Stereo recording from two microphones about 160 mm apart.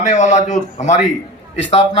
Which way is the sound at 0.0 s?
50° left (ahead or behind).